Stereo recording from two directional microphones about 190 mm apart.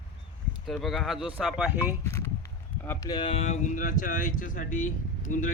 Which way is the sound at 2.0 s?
15° left (ahead or behind).